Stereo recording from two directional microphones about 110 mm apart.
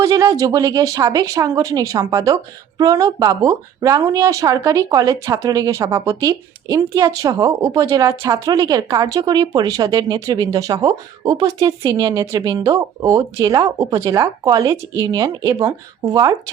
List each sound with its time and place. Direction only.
0.0 s speech: 30° right (ahead or behind)